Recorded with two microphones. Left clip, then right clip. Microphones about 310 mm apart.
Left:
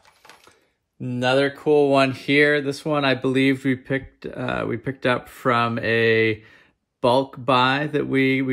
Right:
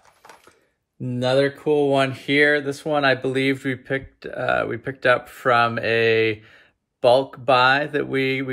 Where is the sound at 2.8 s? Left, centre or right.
Left.